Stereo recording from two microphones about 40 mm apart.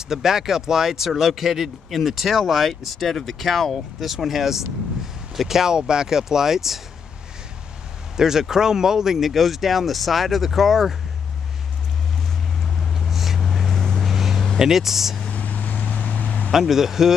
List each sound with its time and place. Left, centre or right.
0.1 s speech: centre
8.2 s speech: centre
12.6 s vehicle: centre
14.0 s a sound: centre
14.6 s speech: centre
15.3 s vehicle: left
16.5 s speech: centre